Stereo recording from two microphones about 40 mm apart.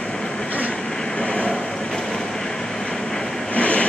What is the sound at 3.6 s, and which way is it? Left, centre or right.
Vehicle, left.